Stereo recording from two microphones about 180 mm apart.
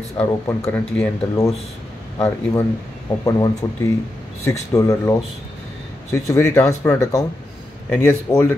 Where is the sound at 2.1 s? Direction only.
20° left (ahead or behind).